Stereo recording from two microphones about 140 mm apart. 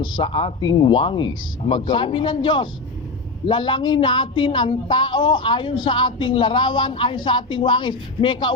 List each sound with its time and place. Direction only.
0.0 s speech: 35° left (ahead or behind)